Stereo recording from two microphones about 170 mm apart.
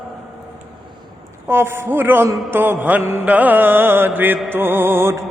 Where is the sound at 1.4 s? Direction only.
15° right (ahead or behind).